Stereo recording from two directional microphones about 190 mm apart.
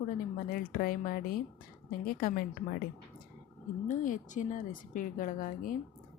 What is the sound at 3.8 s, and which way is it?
Speech, 45° left (ahead or behind).